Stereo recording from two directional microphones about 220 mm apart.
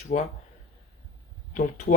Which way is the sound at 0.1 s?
35° left (ahead or behind).